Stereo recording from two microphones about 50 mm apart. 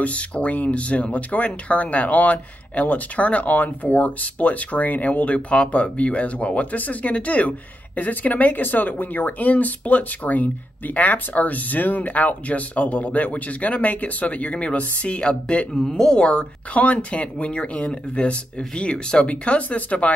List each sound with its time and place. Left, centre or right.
0.0 s speech: left